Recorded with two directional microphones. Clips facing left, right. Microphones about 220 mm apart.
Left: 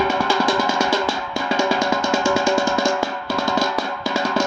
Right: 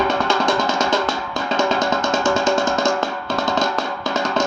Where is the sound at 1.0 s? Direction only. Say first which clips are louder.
Even; 10° left (ahead or behind).